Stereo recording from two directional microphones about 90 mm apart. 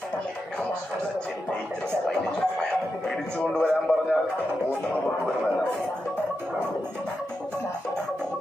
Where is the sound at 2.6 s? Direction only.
10° left (ahead or behind).